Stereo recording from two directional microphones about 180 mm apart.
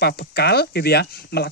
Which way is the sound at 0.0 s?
65° left (ahead or behind).